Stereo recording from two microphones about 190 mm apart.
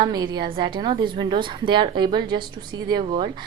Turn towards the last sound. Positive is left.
turn(degrees=-25)  # may be behind; listen again after turning